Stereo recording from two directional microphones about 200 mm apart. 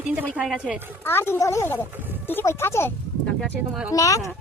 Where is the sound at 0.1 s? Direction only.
5° right (ahead or behind).